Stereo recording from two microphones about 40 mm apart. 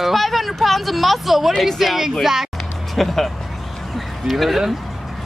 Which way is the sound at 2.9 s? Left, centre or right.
Centre.